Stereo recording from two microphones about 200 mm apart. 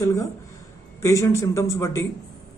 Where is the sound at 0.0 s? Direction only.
15° left (ahead or behind).